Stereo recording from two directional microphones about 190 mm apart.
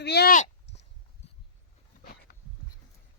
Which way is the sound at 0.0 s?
60° left (ahead or behind).